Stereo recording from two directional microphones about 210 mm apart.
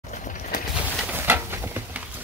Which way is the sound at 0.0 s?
35° left (ahead or behind).